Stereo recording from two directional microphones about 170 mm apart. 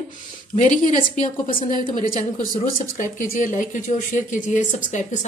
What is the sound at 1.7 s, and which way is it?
Speech, 25° right (ahead or behind).